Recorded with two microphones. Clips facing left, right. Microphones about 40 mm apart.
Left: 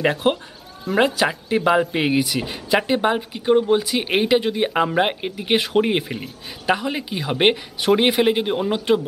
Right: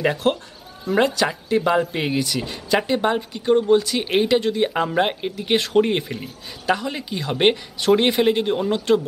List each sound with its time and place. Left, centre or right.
0.0 s speech: centre